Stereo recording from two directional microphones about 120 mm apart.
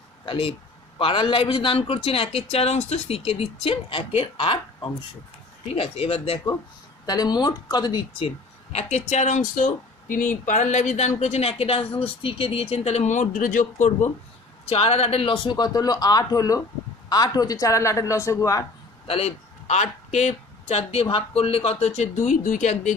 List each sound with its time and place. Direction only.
0.2 s a man's voice: 45° left (ahead or behind)
5.7 s speech: 55° left (ahead or behind)
7.1 s speech: 35° left (ahead or behind)
8.7 s speech: 70° left (ahead or behind); by 14.1 s 85° left
14.7 s a man's voice: 55° left (ahead or behind); by 18.7 s 25° left (ahead or behind)
19.0 s speech: 55° left (ahead or behind); by 22.9 s 90° left